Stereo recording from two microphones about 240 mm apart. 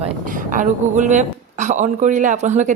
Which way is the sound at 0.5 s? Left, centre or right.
Right.